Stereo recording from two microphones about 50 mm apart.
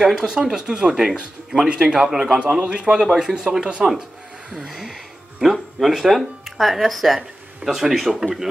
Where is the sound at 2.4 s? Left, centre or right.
Right.